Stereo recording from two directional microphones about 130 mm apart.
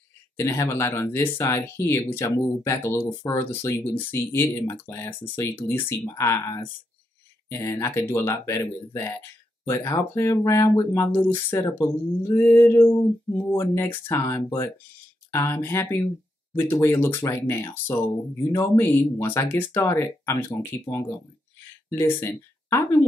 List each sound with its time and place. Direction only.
0.4 s speech: 20° left (ahead or behind)